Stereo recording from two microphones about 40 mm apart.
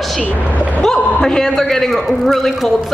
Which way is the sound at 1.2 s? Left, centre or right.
Centre.